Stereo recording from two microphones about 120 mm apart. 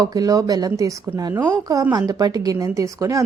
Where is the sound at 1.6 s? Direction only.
30° right (ahead or behind).